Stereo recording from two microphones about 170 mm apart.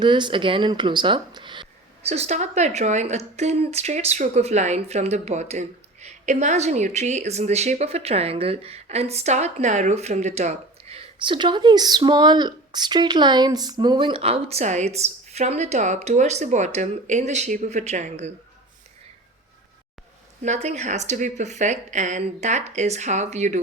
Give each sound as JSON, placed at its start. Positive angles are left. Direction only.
{"t": 0.0, "sound": "speech", "side_deg": -25}
{"t": 2.0, "sound": "speech", "side_deg": -40}
{"t": 20.4, "sound": "a woman's voice", "side_deg": -40}